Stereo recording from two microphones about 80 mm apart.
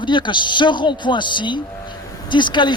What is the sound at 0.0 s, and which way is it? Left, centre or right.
Speech, left.